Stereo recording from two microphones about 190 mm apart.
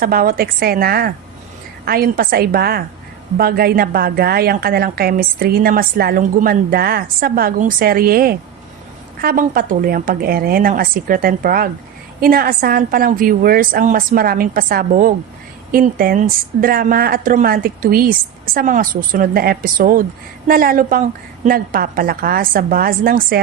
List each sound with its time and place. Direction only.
0.0 s a woman's voice: 50° right (ahead or behind)